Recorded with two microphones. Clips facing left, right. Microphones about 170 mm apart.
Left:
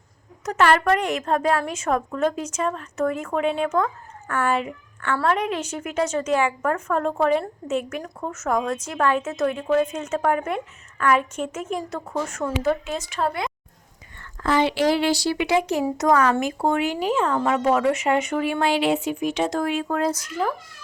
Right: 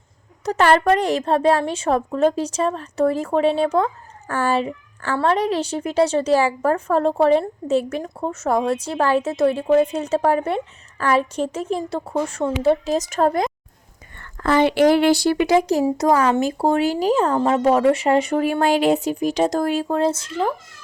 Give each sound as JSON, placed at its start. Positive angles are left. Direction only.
{"t": 0.4, "sound": "a woman's voice", "side_deg": -30}
{"t": 14.4, "sound": "a woman's voice", "side_deg": -55}